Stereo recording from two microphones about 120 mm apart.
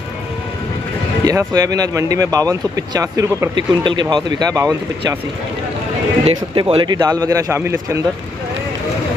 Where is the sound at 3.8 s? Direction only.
40° right (ahead or behind).